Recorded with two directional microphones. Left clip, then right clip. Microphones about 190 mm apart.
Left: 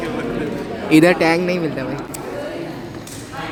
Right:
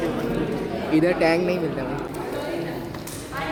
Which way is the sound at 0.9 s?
65° left (ahead or behind).